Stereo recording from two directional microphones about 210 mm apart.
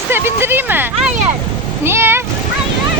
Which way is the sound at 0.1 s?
10° right (ahead or behind).